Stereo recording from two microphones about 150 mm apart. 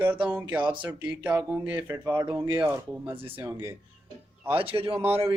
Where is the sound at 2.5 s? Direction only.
15° right (ahead or behind).